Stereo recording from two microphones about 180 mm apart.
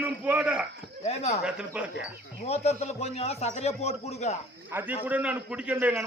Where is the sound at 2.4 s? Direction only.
35° left (ahead or behind).